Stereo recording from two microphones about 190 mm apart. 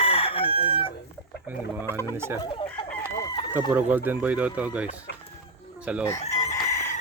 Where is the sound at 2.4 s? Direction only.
25° left (ahead or behind).